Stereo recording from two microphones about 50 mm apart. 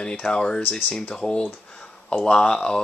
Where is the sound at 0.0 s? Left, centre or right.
Centre.